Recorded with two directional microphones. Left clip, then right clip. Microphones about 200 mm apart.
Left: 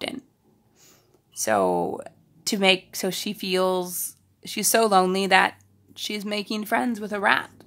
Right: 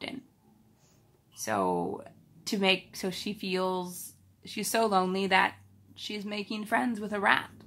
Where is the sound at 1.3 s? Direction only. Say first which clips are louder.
Left 8 dB; 50° left (ahead or behind).